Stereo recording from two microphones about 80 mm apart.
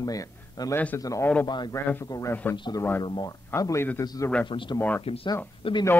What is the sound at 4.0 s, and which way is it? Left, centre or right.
Speech, left.